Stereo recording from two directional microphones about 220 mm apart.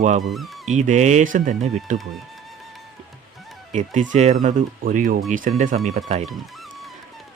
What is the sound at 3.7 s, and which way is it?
Speech, 35° right (ahead or behind).